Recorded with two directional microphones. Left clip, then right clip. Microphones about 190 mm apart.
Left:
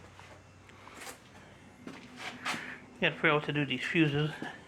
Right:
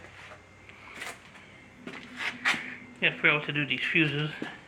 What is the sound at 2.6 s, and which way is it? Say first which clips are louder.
Speech: right 4 dB; 30° left (ahead or behind).